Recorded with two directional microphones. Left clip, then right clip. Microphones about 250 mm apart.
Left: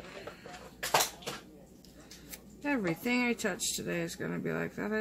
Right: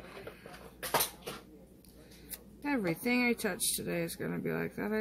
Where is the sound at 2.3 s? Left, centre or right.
Centre.